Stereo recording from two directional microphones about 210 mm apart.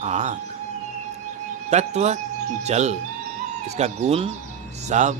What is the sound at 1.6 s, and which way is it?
Speech, 35° right (ahead or behind).